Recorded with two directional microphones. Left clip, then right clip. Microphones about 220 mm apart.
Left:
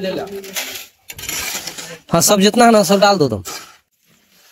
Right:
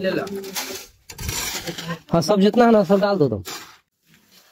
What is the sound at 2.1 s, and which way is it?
A man's voice, 15° left (ahead or behind).